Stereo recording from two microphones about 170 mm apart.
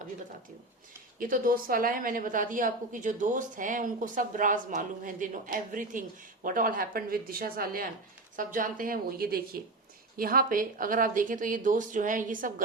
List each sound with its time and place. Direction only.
1.2 s speech: 55° right (ahead or behind)